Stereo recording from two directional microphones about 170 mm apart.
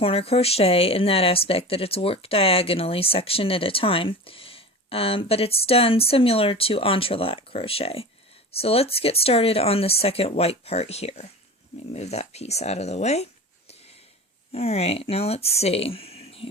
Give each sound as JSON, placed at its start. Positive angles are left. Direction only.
{"t": 0.0, "sound": "speech", "side_deg": 35}
{"t": 14.5, "sound": "speech", "side_deg": 35}